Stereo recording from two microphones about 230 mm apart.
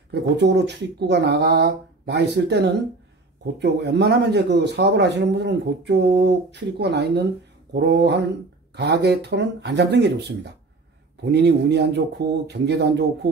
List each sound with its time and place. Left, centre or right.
0.1 s a man's voice: right